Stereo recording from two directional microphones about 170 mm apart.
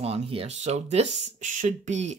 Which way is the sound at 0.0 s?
35° right (ahead or behind).